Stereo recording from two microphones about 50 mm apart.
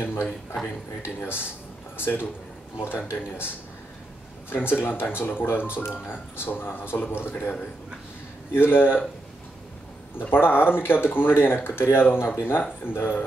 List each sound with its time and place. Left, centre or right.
0.0 s a man's voice: left
4.5 s speech: left
8.5 s speech: left
10.3 s speech: left